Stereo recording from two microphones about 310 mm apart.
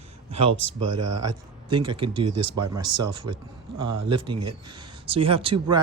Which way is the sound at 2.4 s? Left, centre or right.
Right.